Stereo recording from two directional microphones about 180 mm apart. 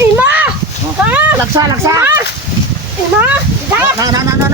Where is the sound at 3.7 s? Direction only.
20° right (ahead or behind).